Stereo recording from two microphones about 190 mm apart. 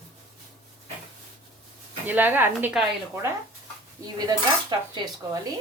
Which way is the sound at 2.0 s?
10° right (ahead or behind).